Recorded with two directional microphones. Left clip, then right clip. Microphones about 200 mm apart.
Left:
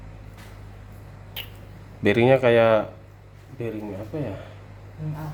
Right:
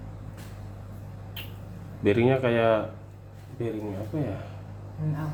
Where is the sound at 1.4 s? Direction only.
40° left (ahead or behind).